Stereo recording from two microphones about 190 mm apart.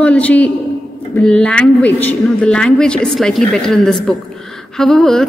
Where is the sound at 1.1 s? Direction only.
5° left (ahead or behind).